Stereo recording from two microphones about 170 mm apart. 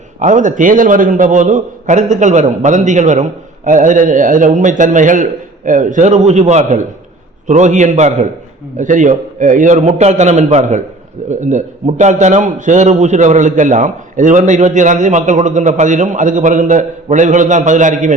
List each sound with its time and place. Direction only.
0.2 s a man's voice: 45° right (ahead or behind)